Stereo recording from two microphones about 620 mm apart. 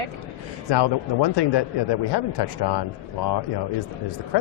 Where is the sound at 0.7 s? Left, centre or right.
Left.